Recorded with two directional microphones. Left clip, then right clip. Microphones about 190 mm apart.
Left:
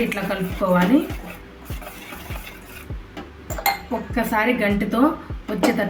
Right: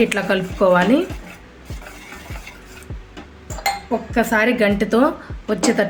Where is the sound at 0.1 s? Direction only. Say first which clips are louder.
Right 5 dB; 60° right (ahead or behind).